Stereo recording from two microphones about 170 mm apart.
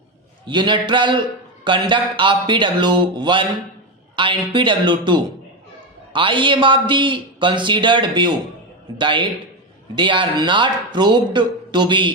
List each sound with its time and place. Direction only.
0.4 s a man's voice: 25° right (ahead or behind)